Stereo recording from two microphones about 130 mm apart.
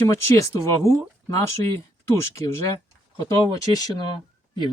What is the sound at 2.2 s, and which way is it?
Speech, 20° left (ahead or behind).